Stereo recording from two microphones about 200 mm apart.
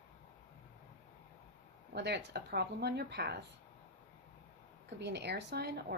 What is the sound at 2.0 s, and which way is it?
Speech, 55° right (ahead or behind).